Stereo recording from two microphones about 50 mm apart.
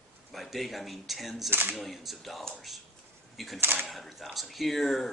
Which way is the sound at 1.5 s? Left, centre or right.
Right.